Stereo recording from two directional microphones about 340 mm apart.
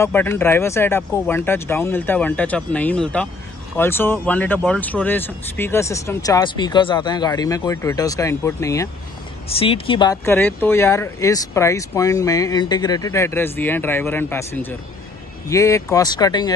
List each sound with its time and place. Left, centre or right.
0.0 s speech: centre